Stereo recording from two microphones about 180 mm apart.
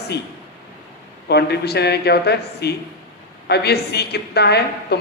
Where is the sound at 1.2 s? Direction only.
65° left (ahead or behind).